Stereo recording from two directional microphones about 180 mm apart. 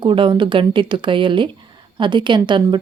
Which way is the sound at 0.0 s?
30° right (ahead or behind).